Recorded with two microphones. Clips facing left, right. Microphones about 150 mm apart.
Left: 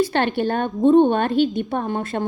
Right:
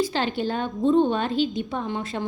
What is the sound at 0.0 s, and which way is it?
A woman's voice, 60° left (ahead or behind).